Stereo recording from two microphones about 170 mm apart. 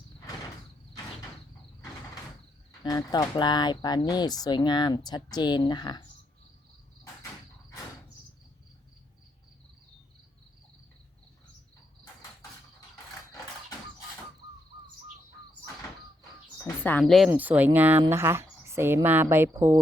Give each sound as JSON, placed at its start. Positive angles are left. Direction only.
{"t": 2.8, "sound": "speech", "side_deg": 20}
{"t": 16.6, "sound": "speech", "side_deg": 10}